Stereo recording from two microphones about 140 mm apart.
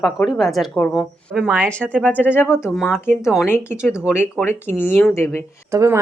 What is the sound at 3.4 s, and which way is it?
Speech, 15° left (ahead or behind).